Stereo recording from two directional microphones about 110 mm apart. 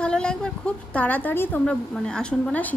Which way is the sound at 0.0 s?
10° left (ahead or behind).